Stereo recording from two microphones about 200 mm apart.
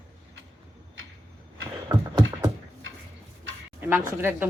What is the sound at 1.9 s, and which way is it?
Beatboxing, 20° right (ahead or behind).